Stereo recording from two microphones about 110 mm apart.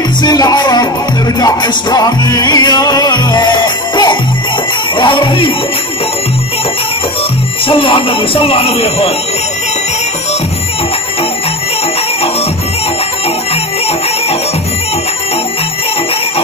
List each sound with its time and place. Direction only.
0.2 s music: 40° left (ahead or behind)
7.6 s speech: 50° left (ahead or behind)